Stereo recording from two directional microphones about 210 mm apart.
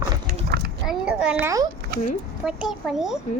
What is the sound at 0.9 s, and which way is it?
A child's voice, 5° right (ahead or behind).